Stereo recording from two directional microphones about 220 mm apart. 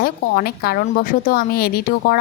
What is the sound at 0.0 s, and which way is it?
Speech, 45° left (ahead or behind).